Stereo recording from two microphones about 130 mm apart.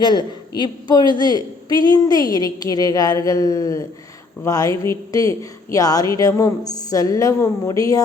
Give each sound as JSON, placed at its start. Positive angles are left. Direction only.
{"t": 0.0, "sound": "a woman's voice", "side_deg": 35}